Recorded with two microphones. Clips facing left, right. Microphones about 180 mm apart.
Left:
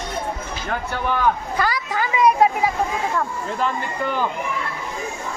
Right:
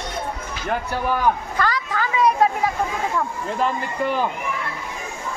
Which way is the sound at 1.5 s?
10° left (ahead or behind).